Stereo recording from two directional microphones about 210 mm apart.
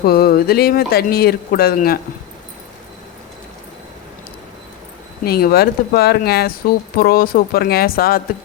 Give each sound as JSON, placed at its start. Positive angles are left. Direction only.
{"t": 0.0, "sound": "speech", "side_deg": 45}
{"t": 5.2, "sound": "speech", "side_deg": 45}